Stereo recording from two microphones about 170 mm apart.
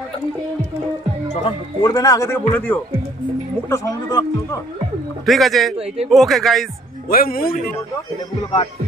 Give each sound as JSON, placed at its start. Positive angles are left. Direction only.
{"t": 1.3, "sound": "a man's voice", "side_deg": 30}
{"t": 5.2, "sound": "speech", "side_deg": 0}
{"t": 7.1, "sound": "speech", "side_deg": 60}